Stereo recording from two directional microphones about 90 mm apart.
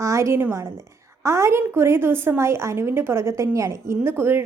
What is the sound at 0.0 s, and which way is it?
A woman's voice, 35° right (ahead or behind).